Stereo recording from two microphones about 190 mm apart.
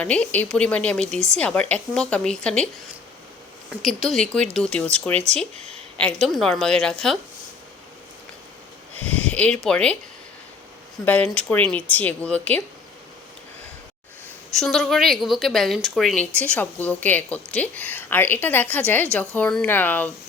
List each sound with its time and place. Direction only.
0.0 s a woman's voice: 5° left (ahead or behind)
3.7 s a woman's voice: centre (ahead or behind)
5.1 s speech: 35° right (ahead or behind)
6.0 s a woman's voice: 5° left (ahead or behind)
9.1 s speech: 5° left (ahead or behind)
11.0 s a woman's voice: 10° left (ahead or behind)
14.5 s a woman's voice: centre (ahead or behind)